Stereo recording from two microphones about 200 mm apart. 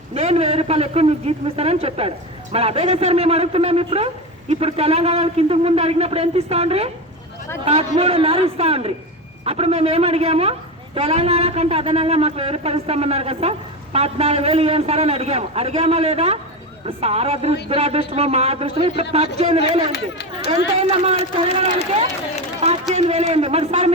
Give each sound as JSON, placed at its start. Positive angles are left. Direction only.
{"t": 0.1, "sound": "a man's voice", "side_deg": -30}
{"t": 19.9, "sound": "speech", "side_deg": 55}
{"t": 20.7, "sound": "a man's voice", "side_deg": -30}